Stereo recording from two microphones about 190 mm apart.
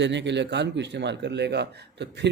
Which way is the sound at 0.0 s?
70° right (ahead or behind).